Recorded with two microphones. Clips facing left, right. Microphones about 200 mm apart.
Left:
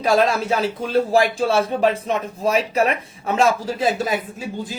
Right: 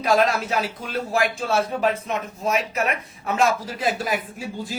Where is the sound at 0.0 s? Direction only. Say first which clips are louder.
Left 2 dB; 30° left (ahead or behind).